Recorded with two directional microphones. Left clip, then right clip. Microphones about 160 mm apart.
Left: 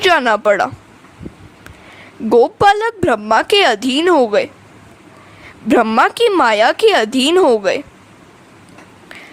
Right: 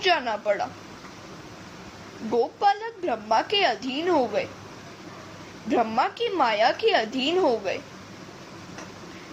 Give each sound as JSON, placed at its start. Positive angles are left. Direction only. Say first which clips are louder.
{"t": 0.0, "sound": "speech", "louder": "left 12 dB", "side_deg": 75}
{"t": 2.3, "sound": "speech", "louder": "left 12 dB", "side_deg": 85}
{"t": 5.6, "sound": "speech", "louder": "left 11 dB", "side_deg": 75}